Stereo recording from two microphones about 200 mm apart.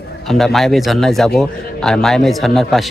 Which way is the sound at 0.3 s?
Centre (ahead or behind).